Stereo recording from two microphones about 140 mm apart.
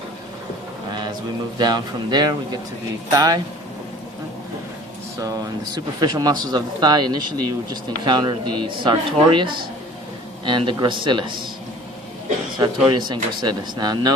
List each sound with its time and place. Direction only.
0.9 s a sound: 30° right (ahead or behind)
1.5 s speech: 30° right (ahead or behind)
5.2 s speech: 25° right (ahead or behind)
12.5 s speech: 30° right (ahead or behind)